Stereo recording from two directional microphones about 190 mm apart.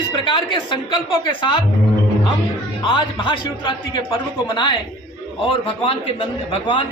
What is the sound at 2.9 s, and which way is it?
A man's voice, 25° left (ahead or behind).